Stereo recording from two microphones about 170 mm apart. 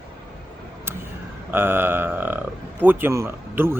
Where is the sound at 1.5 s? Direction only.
15° right (ahead or behind).